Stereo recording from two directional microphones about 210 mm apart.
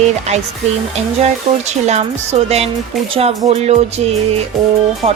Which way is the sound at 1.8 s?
30° right (ahead or behind).